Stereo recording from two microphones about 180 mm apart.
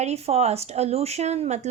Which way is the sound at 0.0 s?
35° right (ahead or behind).